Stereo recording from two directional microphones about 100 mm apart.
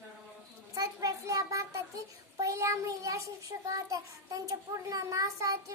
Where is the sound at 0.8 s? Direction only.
35° right (ahead or behind).